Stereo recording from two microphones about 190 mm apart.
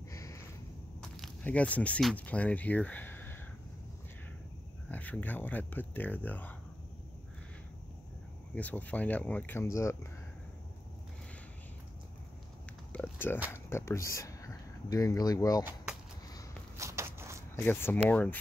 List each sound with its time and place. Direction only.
0.1 s a sound: 15° left (ahead or behind)
1.1 s speech: 5° left (ahead or behind)
4.8 s speech: 10° left (ahead or behind)
8.5 s speech: 10° left (ahead or behind)
12.9 s a sound: 10° left (ahead or behind)
13.5 s speech: 15° left (ahead or behind)
15.6 s a sound: 5° right (ahead or behind)
16.7 s walk: 15° right (ahead or behind)
17.6 s speech: 10° left (ahead or behind)